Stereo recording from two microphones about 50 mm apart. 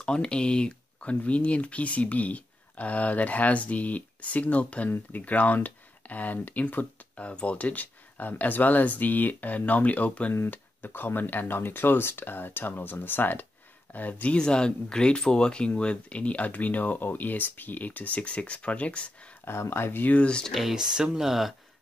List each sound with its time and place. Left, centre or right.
0.0 s speech: centre
10.3 s speech: left
14.3 s speech: centre
19.4 s speech: left
20.1 s speech: left
20.7 s speech: centre